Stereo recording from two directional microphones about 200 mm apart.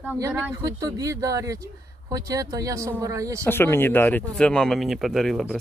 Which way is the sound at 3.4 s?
10° left (ahead or behind).